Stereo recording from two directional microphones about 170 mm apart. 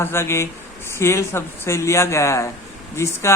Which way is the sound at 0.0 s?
15° left (ahead or behind).